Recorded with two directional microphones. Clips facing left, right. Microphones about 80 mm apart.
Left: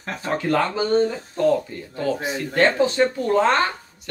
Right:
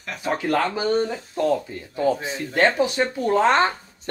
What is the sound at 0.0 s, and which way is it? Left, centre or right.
Speech, left.